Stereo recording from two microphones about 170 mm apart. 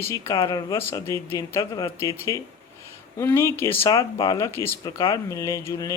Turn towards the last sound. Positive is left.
turn(degrees=20)  # may be behind; listen again after turning